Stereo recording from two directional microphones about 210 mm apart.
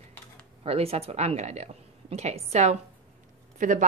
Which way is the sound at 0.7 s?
30° right (ahead or behind).